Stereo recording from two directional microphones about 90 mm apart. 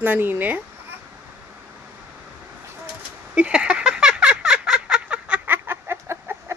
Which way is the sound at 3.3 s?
10° right (ahead or behind).